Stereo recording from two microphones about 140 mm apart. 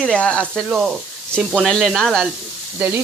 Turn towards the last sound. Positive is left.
turn(degrees=-10)  # may be behind; listen again after turning